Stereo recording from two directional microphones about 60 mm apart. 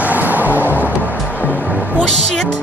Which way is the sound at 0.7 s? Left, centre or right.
Left.